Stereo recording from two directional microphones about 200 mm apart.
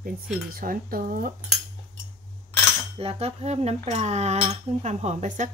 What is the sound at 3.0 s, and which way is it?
Cutlery, 30° right (ahead or behind).